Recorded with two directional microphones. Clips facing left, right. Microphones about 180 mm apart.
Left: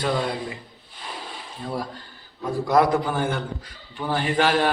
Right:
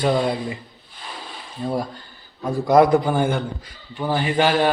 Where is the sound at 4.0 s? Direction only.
5° right (ahead or behind).